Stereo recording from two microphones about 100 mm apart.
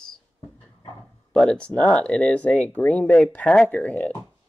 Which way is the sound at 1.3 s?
10° left (ahead or behind).